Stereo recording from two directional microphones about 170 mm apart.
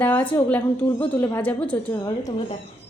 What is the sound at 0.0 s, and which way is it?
A woman's voice, 10° left (ahead or behind).